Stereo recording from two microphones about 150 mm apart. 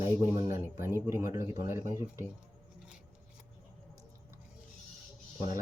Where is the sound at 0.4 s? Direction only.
20° right (ahead or behind).